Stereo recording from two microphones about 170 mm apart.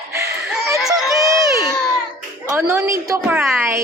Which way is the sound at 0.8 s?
Centre (ahead or behind).